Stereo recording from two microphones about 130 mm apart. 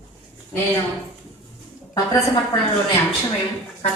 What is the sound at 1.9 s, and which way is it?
Speech, 25° left (ahead or behind).